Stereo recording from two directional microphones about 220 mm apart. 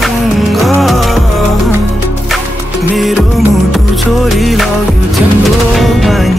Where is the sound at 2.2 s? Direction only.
Centre (ahead or behind).